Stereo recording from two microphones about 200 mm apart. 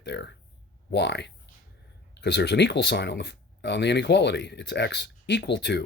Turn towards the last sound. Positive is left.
turn(degrees=60)  # may be behind; listen again after turning